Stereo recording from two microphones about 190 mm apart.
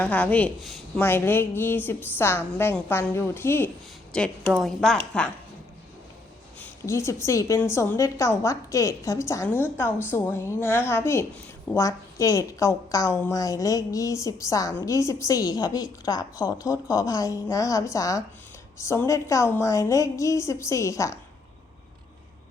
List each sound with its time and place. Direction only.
0.0 s a woman's voice: 10° left (ahead or behind)
6.6 s a woman's voice: 15° left (ahead or behind)